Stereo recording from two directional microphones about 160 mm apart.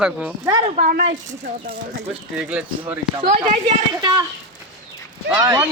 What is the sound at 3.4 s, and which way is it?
Speech, 30° right (ahead or behind).